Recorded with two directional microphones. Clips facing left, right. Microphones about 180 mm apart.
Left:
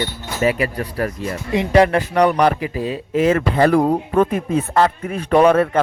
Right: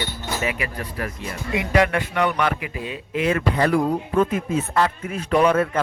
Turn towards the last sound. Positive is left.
turn(degrees=45)  # may be behind; listen again after turning